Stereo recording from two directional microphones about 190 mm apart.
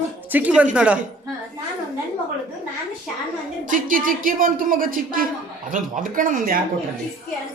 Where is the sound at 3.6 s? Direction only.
45° right (ahead or behind).